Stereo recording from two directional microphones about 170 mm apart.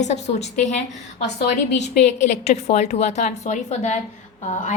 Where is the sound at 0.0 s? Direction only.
40° left (ahead or behind).